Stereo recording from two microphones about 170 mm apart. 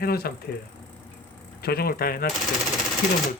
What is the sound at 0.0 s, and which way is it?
Speech, 65° left (ahead or behind).